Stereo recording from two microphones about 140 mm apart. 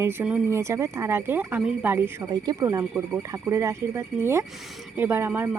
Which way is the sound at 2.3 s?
25° right (ahead or behind).